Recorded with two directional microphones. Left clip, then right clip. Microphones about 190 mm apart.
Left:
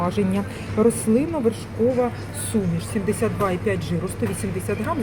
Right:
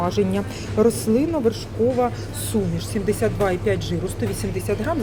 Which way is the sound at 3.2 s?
5° right (ahead or behind).